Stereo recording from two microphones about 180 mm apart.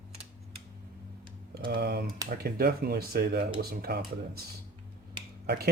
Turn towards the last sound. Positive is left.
turn(degrees=-60)  # may be behind; listen again after turning